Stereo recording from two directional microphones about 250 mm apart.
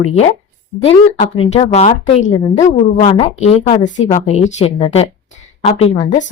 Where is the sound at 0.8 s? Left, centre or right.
Left.